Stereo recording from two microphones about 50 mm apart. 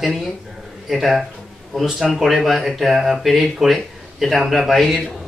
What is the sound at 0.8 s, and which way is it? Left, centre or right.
Speech, centre.